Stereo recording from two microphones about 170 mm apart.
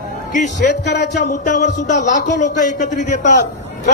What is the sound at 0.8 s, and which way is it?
Speech, 75° left (ahead or behind).